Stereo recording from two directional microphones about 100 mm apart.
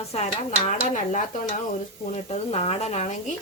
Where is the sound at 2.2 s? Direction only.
90° left.